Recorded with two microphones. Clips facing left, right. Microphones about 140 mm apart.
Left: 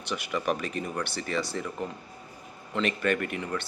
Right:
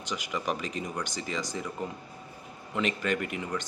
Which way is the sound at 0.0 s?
15° right (ahead or behind).